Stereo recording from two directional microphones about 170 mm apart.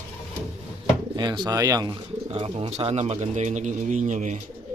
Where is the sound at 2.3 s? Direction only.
35° right (ahead or behind).